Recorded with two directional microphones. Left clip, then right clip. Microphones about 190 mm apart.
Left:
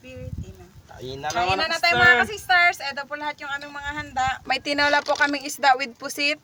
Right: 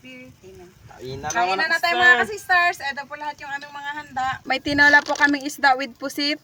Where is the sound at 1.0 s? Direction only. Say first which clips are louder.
Right 1 dB; 10° right (ahead or behind).